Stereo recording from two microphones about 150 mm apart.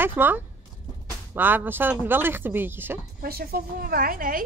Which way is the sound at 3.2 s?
90° right.